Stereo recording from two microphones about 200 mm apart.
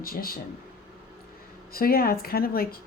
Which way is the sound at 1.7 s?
50° left (ahead or behind).